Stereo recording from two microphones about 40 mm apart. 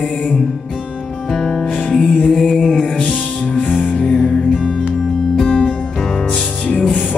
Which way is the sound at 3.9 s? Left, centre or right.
Centre.